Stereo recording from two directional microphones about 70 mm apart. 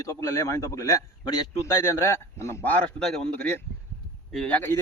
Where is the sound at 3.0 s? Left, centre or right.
Centre.